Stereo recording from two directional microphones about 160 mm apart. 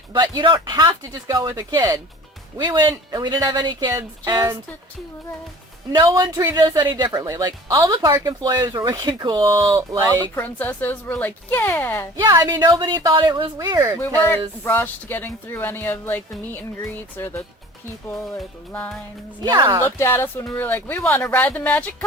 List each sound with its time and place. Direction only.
0.1 s speech: 30° right (ahead or behind)
5.9 s speech: 25° right (ahead or behind)
10.1 s speech: 10° left (ahead or behind)
12.1 s speech: 20° right (ahead or behind)
14.2 s speech: 10° left (ahead or behind)
19.4 s speech: 25° right (ahead or behind)
19.8 s speech: 15° left (ahead or behind)